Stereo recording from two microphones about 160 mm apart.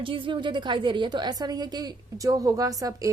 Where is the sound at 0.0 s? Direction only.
30° right (ahead or behind).